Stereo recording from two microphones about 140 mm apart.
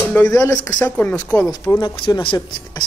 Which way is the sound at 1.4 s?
25° left (ahead or behind).